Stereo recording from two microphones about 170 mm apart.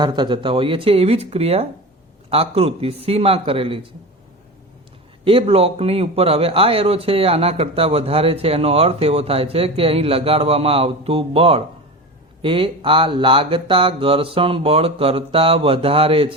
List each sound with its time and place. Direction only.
0.0 s a man's voice: 25° right (ahead or behind)
5.2 s a man's voice: 35° right (ahead or behind)